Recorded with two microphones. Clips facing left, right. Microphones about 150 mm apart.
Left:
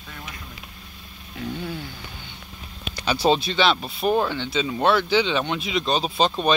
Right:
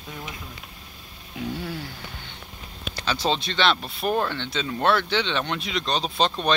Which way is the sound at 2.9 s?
15° left (ahead or behind).